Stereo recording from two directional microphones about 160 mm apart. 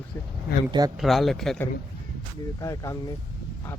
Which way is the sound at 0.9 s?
Centre (ahead or behind).